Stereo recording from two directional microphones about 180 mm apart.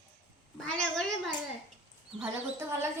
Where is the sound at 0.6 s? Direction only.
5° left (ahead or behind).